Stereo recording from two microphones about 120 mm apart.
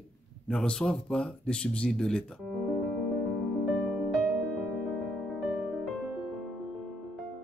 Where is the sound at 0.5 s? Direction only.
5° left (ahead or behind).